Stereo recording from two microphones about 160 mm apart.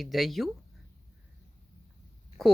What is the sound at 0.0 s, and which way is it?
Speech, centre (ahead or behind).